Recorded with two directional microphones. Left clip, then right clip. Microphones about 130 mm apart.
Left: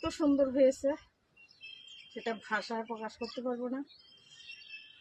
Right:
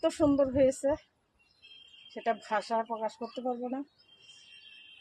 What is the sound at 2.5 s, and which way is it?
Speech, 25° left (ahead or behind).